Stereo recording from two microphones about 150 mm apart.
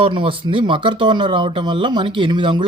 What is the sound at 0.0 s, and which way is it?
Speech, 35° right (ahead or behind).